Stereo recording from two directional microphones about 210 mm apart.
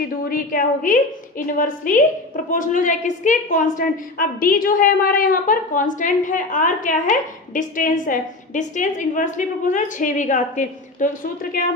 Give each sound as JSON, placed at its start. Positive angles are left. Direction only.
{"t": 0.0, "sound": "a woman's voice", "side_deg": 40}